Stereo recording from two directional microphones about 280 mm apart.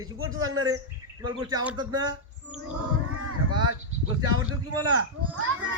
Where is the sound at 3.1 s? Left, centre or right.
Right.